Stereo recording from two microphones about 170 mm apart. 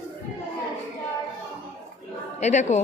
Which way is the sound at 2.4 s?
45° left (ahead or behind).